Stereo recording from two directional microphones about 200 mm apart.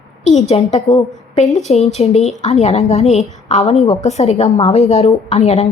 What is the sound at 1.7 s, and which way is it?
A woman's voice, 30° left (ahead or behind).